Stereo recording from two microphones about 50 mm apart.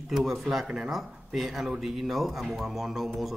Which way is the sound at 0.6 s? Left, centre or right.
Centre.